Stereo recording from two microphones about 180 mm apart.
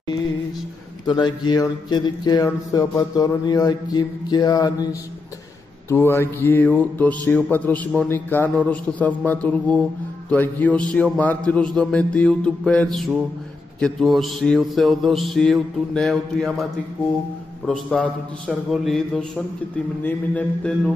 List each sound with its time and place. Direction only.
1.0 s speech: 25° left (ahead or behind)
5.9 s mantra: 15° left (ahead or behind)
17.6 s mantra: 5° left (ahead or behind)